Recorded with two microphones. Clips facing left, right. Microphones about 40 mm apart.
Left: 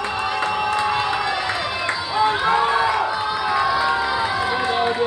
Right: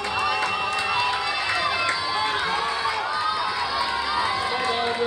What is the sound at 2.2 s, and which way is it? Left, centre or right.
Music, left.